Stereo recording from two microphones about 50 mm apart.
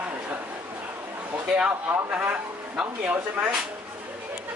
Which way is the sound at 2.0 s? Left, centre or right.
Right.